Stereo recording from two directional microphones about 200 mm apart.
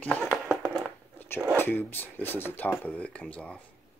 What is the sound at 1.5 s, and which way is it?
Speech, 10° left (ahead or behind).